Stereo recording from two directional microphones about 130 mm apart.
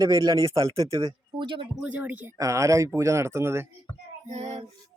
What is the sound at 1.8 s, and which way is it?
Speech, 10° right (ahead or behind).